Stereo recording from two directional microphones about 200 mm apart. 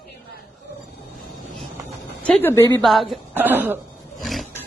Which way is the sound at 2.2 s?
10° left (ahead or behind).